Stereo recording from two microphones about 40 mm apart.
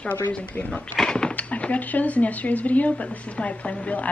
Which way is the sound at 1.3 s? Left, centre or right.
Left.